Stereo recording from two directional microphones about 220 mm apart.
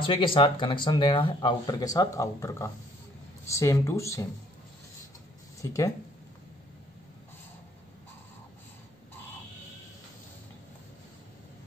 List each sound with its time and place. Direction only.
0.0 s speech: 25° left (ahead or behind)
5.6 s speech: 15° left (ahead or behind)